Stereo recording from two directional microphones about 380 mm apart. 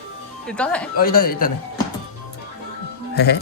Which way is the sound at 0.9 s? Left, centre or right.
Left.